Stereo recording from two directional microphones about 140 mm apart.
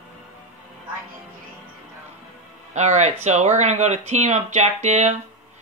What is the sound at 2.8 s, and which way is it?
Speech, 55° right (ahead or behind).